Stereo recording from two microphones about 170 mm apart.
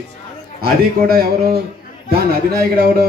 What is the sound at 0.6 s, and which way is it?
Speech, 65° right (ahead or behind).